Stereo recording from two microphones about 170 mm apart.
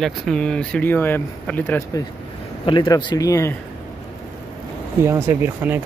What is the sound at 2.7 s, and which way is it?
Speech, 25° left (ahead or behind).